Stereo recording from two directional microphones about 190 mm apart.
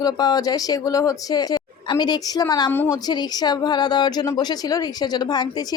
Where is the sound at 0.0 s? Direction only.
20° left (ahead or behind).